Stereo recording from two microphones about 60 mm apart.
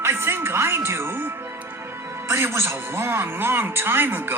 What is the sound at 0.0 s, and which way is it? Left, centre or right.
Speech, right.